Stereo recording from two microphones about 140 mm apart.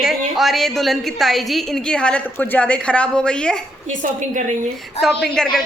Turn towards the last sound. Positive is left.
turn(degrees=5)  # may be behind; listen again after turning